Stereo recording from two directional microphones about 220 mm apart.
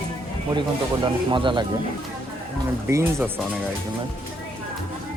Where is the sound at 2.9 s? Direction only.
10° right (ahead or behind).